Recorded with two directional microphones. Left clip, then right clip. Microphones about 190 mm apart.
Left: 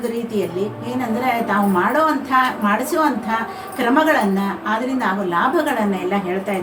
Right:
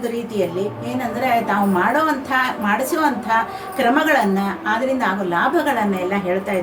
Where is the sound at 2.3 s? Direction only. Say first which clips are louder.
Left 2 dB; 20° right (ahead or behind).